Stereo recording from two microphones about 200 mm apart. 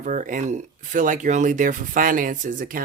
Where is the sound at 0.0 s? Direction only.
40° right (ahead or behind).